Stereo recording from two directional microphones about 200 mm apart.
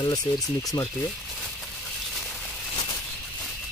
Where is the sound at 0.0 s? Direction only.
20° left (ahead or behind).